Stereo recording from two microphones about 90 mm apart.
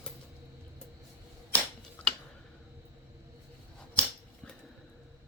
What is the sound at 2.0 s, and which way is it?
Tick, 15° left (ahead or behind).